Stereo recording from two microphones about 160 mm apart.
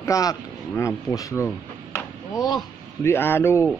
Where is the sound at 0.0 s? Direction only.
20° left (ahead or behind).